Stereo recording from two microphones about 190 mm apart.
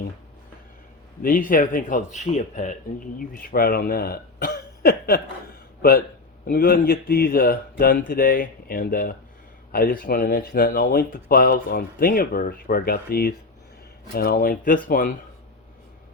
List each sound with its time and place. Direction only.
1.2 s a man's voice: 45° left (ahead or behind)
6.4 s speech: 50° left (ahead or behind)